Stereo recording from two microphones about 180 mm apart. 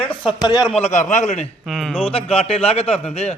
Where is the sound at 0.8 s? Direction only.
40° left (ahead or behind).